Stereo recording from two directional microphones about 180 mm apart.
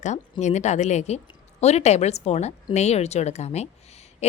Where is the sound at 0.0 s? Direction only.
40° left (ahead or behind).